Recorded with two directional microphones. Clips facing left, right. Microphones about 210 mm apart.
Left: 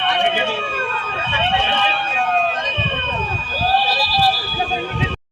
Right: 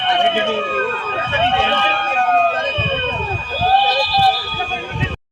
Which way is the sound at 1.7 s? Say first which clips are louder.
Right 2 dB; 45° right (ahead or behind).